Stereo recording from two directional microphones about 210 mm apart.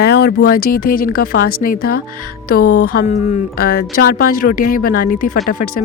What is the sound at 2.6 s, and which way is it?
Speech, 90° left.